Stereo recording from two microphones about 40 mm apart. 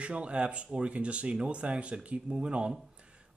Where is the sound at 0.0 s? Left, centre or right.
Right.